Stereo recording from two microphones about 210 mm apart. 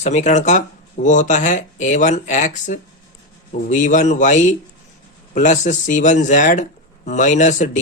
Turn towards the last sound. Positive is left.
turn(degrees=35)  # may be behind; listen again after turning